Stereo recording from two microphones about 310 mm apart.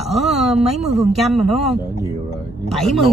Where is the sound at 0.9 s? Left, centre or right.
Centre.